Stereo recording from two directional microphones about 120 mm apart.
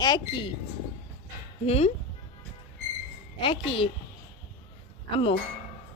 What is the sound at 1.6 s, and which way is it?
Speech, 60° left (ahead or behind).